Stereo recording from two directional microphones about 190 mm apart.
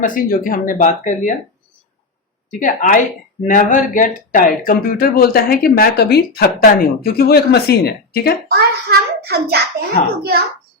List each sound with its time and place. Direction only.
0.0 s speech: 45° left (ahead or behind)
2.5 s speech: 45° left (ahead or behind)
8.4 s child singing: 55° right (ahead or behind)